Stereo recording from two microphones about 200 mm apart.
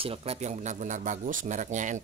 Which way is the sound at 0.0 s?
30° right (ahead or behind).